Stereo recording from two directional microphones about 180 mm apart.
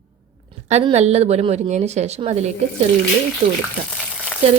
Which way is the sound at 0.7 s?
35° right (ahead or behind).